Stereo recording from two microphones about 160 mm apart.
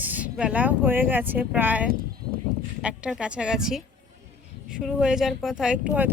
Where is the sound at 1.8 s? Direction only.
65° right (ahead or behind).